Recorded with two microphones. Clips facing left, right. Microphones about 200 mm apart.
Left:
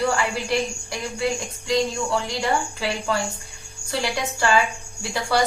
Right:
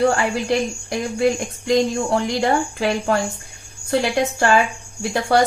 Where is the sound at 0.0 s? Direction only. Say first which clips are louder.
Right 5 dB; 55° right (ahead or behind).